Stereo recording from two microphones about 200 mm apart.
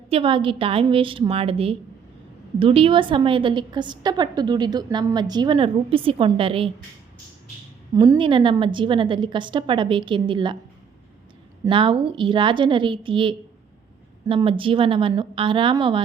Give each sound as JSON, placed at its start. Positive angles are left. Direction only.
{"t": 0.1, "sound": "a woman's voice", "side_deg": -25}
{"t": 7.9, "sound": "a woman's voice", "side_deg": -20}
{"t": 11.6, "sound": "a woman's voice", "side_deg": -25}